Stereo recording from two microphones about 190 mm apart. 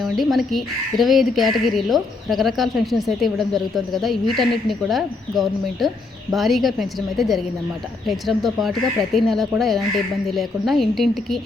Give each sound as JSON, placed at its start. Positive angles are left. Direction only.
{"t": 0.0, "sound": "speech", "side_deg": 0}